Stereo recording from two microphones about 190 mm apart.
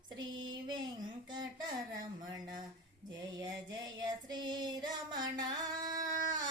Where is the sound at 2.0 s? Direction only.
20° right (ahead or behind).